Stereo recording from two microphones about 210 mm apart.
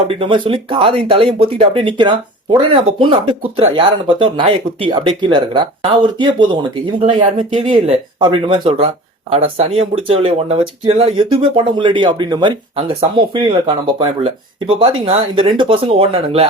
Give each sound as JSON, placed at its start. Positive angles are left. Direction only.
{"t": 0.1, "sound": "speech", "side_deg": -25}